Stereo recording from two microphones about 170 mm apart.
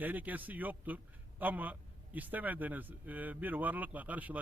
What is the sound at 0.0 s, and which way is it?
A man's voice, 10° right (ahead or behind).